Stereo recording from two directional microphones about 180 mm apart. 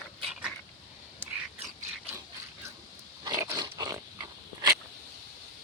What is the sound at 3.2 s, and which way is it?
Pig, 25° right (ahead or behind).